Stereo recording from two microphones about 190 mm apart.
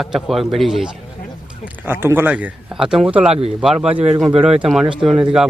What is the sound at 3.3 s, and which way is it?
Speech, 30° right (ahead or behind).